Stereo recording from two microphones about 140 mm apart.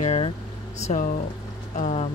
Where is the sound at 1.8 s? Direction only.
50° left (ahead or behind).